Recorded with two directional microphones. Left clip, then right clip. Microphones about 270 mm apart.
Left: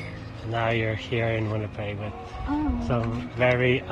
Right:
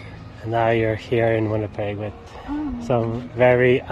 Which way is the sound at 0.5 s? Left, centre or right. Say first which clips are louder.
Right 7 dB; centre.